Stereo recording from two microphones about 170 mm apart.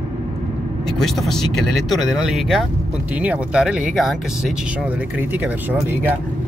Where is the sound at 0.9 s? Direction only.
Centre (ahead or behind).